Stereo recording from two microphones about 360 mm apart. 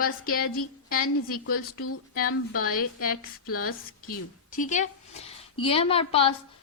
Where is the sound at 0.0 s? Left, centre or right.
Left.